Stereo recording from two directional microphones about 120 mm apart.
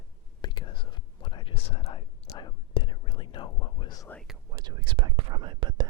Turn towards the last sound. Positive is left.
turn(degrees=-40)  # may be behind; listen again after turning